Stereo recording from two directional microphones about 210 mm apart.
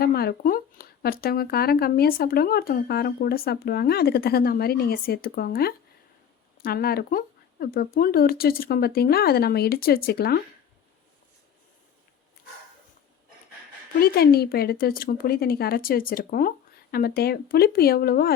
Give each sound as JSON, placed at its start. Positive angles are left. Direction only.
{"t": 0.0, "sound": "speech", "side_deg": 50}
{"t": 14.0, "sound": "speech", "side_deg": 45}